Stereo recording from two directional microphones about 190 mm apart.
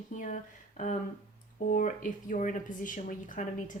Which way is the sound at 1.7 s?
45° left (ahead or behind).